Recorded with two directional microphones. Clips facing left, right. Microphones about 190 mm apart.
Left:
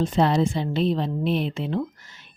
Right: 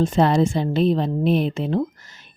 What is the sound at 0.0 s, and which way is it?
A woman's voice, 50° right (ahead or behind).